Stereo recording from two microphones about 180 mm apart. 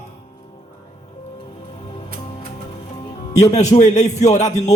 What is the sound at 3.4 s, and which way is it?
Speech, 40° left (ahead or behind).